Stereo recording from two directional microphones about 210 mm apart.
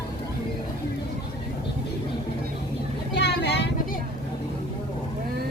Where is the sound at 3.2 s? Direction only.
55° left (ahead or behind).